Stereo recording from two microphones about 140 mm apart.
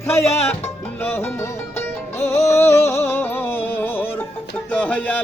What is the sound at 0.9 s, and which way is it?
Music, 15° left (ahead or behind).